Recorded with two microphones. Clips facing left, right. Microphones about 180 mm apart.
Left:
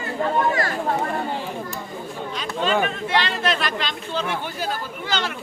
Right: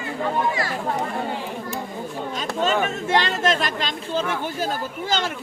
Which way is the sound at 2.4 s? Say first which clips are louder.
Even; 45° right (ahead or behind).